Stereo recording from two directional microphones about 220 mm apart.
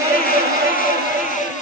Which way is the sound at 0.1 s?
40° left (ahead or behind).